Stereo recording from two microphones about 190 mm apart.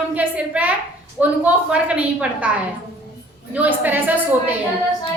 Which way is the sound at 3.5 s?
10° right (ahead or behind).